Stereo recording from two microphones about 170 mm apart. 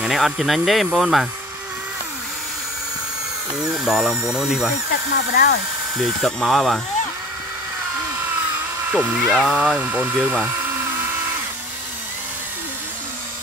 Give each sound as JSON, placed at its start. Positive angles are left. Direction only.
{"t": 0.0, "sound": "speech", "side_deg": 0}
{"t": 3.5, "sound": "speech", "side_deg": -5}
{"t": 5.1, "sound": "speech", "side_deg": 60}
{"t": 5.9, "sound": "speech", "side_deg": 0}
{"t": 8.9, "sound": "speech", "side_deg": -5}